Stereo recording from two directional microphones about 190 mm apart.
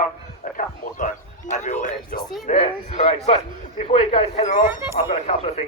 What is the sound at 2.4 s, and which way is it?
A man's voice, 35° left (ahead or behind).